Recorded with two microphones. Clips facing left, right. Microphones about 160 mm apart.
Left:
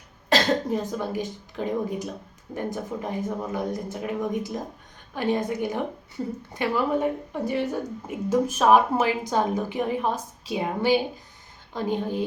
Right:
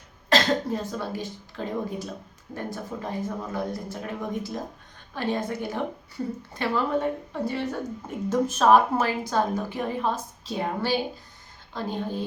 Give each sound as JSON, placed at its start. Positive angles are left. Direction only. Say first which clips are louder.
{"t": 0.7, "sound": "a woman's voice", "louder": "left 3 dB", "side_deg": 15}